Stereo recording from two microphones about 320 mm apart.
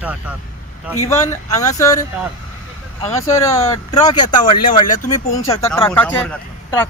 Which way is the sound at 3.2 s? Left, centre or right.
Centre.